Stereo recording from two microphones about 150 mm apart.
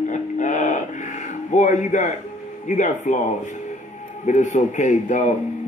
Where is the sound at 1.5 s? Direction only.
55° left (ahead or behind).